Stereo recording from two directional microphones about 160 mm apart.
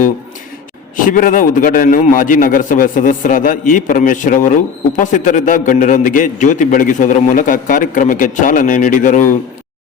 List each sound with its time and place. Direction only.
0.9 s a man's voice: 55° left (ahead or behind)